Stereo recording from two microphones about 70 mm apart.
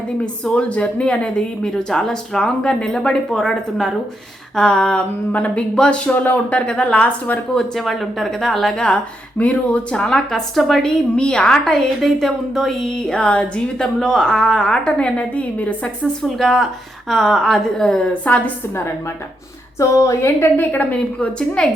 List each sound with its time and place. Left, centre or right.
0.4 s a woman's voice: centre
6.1 s speech: left
7.8 s a woman's voice: centre
16.2 s a woman's voice: centre
19.8 s a woman's voice: left
20.6 s a woman's voice: left